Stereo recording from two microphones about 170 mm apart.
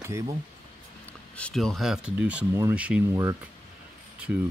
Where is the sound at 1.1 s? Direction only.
5° left (ahead or behind).